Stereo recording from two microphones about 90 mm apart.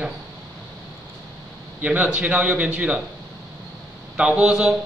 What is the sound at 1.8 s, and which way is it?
A man's voice, 15° right (ahead or behind).